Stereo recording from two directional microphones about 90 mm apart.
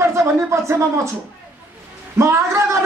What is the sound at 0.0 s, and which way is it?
Speech, 30° right (ahead or behind).